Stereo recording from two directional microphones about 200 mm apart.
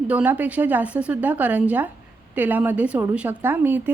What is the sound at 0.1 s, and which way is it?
A woman's voice, 5° right (ahead or behind).